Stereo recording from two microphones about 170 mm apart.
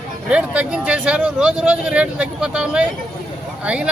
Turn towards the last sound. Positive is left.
turn(degrees=-5)  # may be behind; listen again after turning